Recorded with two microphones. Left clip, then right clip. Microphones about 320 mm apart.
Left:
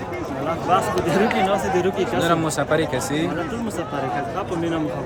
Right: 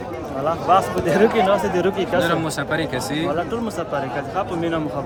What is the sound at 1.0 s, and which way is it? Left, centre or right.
Speech, centre.